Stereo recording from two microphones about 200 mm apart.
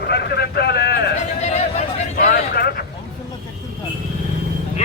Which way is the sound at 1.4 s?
35° left (ahead or behind).